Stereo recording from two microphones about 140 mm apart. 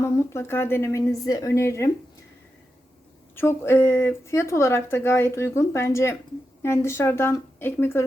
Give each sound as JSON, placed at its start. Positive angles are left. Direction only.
{"t": 0.0, "sound": "speech", "side_deg": 20}
{"t": 3.3, "sound": "a woman's voice", "side_deg": 15}